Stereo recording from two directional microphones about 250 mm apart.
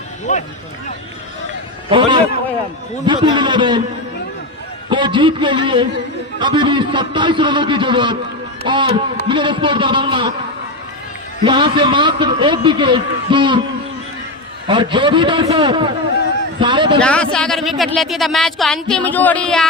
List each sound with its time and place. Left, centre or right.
0.3 s speech: left
1.9 s a man's voice: centre
4.9 s a man's voice: centre
11.4 s a man's voice: centre
14.7 s a man's voice: centre
17.0 s speech: centre